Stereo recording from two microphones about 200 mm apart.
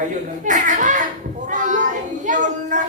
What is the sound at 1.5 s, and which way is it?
Child singing, 40° right (ahead or behind).